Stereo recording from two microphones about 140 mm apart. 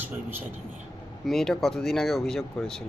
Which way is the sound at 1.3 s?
Centre (ahead or behind).